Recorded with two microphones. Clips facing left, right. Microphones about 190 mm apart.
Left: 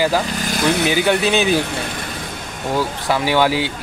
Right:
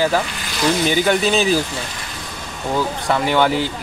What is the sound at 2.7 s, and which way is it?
Speech, centre (ahead or behind).